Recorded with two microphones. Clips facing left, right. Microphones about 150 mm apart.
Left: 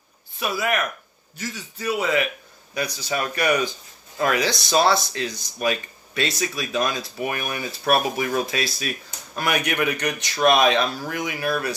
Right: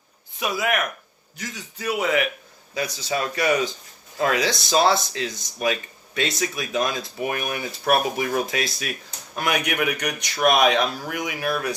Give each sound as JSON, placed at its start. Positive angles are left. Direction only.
{"t": 0.3, "sound": "speech", "side_deg": -15}